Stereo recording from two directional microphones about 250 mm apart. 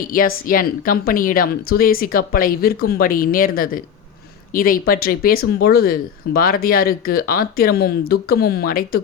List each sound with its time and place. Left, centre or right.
0.1 s speech: left